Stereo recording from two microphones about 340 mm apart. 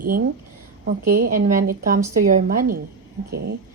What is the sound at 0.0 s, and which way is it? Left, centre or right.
Speech, right.